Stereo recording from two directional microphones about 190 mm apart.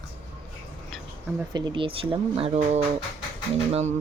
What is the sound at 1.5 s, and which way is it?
Speech, 25° right (ahead or behind).